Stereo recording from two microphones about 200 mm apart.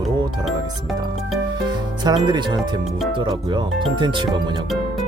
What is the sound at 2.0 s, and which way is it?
Speech, 20° right (ahead or behind).